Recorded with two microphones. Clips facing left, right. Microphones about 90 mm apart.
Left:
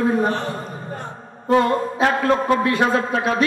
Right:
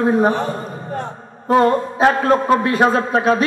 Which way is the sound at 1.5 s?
35° right (ahead or behind).